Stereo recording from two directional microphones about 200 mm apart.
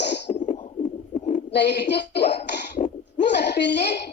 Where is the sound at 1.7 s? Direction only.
55° left (ahead or behind).